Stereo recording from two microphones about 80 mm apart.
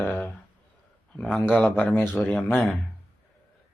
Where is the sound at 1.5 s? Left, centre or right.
Centre.